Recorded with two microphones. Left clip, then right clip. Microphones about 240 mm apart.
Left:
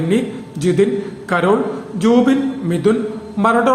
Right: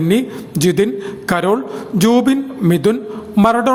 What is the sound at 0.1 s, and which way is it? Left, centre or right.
A man's voice, right.